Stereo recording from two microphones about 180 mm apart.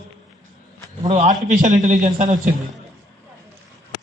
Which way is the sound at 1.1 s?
40° right (ahead or behind).